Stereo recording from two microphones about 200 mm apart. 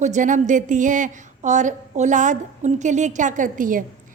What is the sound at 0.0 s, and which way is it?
A woman's voice, 40° right (ahead or behind).